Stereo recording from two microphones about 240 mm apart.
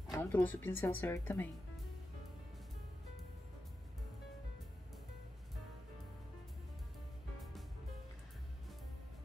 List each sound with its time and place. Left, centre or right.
0.1 s speech: centre